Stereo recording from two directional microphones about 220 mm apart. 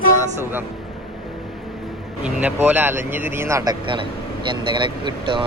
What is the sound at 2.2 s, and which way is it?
Speech, 10° right (ahead or behind).